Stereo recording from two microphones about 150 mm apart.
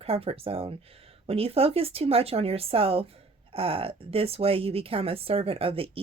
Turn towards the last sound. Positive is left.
turn(degrees=-40)  # may be behind; listen again after turning